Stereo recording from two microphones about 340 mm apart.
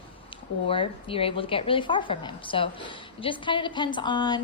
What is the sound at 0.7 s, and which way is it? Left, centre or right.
A woman's voice, centre.